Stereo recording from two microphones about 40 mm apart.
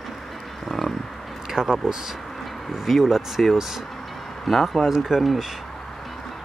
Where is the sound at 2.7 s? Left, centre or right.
Centre.